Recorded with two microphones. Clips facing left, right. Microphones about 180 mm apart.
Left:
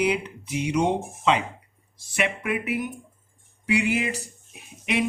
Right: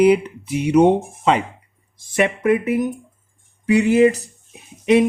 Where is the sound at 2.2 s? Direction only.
40° right (ahead or behind).